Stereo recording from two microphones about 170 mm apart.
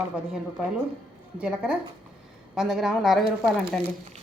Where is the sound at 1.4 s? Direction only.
5° right (ahead or behind).